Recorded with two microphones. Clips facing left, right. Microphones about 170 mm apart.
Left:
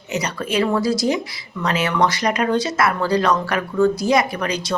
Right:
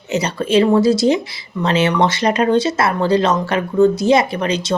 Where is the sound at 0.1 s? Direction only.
30° right (ahead or behind).